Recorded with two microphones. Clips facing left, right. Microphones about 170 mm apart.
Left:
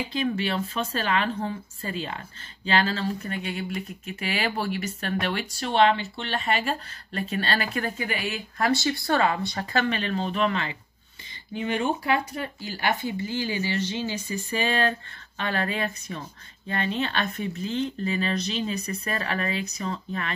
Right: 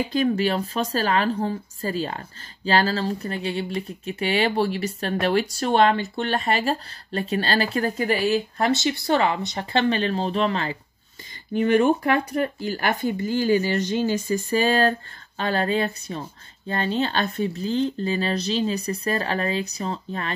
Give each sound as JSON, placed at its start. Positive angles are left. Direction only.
{"t": 0.1, "sound": "a woman's voice", "side_deg": -40}
{"t": 11.5, "sound": "a woman's voice", "side_deg": -55}